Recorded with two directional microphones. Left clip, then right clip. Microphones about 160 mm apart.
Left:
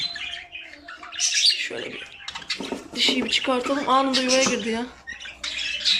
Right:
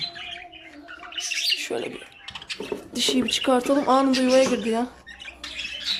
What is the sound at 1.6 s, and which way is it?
Bird, 15° right (ahead or behind).